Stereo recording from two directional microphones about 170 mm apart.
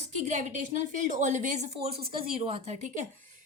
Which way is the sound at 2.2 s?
30° right (ahead or behind).